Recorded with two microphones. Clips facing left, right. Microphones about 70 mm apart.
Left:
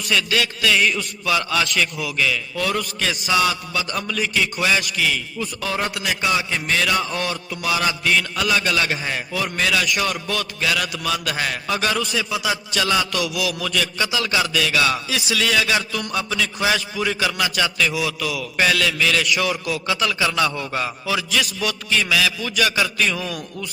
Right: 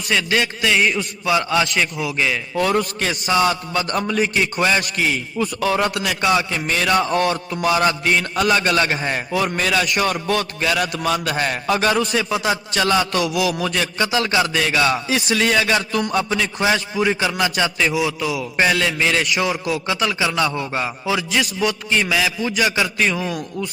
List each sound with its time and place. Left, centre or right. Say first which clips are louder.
0.1 s a man's voice: right 2 dB; right
6.7 s a man's voice: right 5 dB; right
15.1 s a man's voice: right 3 dB; right; by 23.6 s centre